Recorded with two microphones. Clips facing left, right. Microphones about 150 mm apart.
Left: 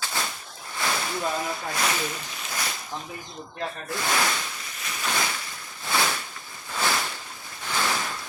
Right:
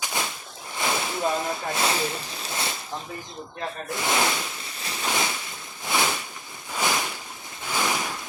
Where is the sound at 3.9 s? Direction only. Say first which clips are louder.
Right 1 dB; 20° right (ahead or behind).